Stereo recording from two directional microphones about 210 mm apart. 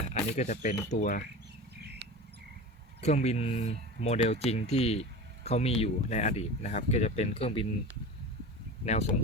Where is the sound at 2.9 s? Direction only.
30° left (ahead or behind).